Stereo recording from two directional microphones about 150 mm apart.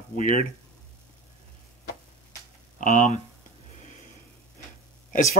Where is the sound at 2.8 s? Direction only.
60° left (ahead or behind).